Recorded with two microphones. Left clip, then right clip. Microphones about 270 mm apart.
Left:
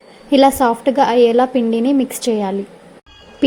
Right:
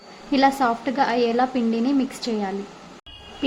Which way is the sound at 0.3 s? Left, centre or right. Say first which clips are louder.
Left 7 dB; centre.